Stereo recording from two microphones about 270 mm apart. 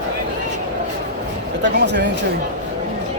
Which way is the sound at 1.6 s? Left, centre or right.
Right.